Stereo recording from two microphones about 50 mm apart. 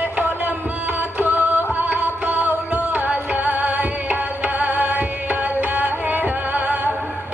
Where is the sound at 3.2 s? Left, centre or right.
Right.